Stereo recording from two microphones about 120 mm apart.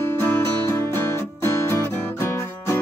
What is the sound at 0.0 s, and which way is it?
Music, 15° left (ahead or behind).